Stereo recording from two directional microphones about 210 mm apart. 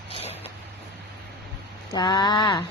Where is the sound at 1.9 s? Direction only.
20° left (ahead or behind).